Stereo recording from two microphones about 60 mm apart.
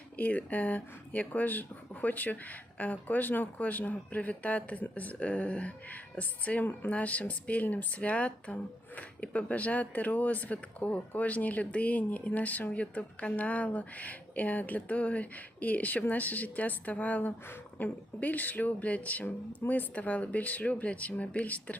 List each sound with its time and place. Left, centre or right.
0.2 s speech: left